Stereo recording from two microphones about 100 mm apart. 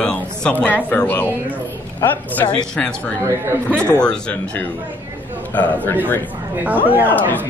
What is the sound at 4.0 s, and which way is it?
Speech, 10° left (ahead or behind).